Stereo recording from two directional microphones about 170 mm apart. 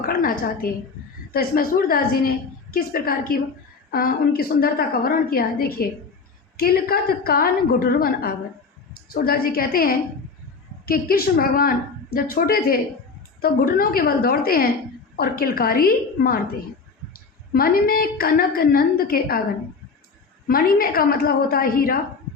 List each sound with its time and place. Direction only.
0.0 s a woman's voice: 55° left (ahead or behind)
17.5 s a woman's voice: 60° left (ahead or behind)
20.5 s a woman's voice: 60° left (ahead or behind)